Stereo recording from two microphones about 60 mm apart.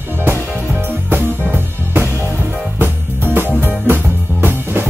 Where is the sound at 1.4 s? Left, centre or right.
Right.